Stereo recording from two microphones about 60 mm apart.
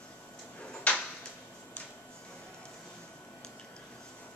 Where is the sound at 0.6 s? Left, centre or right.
Centre.